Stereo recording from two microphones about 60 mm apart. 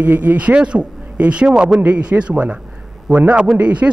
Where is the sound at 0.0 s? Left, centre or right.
Right.